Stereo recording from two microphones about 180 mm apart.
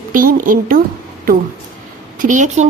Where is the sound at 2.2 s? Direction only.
45° right (ahead or behind).